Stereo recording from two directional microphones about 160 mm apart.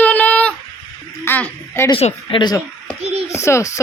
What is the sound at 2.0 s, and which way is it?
Speech, 30° left (ahead or behind).